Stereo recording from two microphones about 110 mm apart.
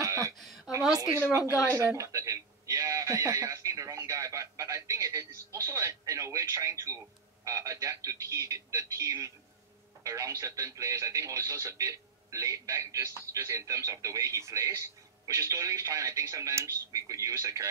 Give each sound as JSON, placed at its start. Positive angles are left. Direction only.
{"t": 0.0, "sound": "a sound", "side_deg": -30}
{"t": 1.1, "sound": "speech", "side_deg": -25}
{"t": 1.4, "sound": "speech", "side_deg": 30}
{"t": 2.0, "sound": "speech", "side_deg": -30}